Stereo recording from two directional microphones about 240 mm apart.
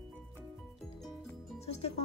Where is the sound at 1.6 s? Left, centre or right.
Left.